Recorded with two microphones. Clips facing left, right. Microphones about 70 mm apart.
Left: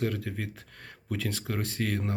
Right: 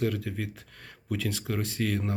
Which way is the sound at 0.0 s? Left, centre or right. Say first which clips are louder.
Right 2 dB; left.